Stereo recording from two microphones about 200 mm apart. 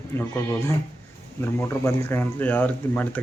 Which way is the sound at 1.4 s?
10° left (ahead or behind).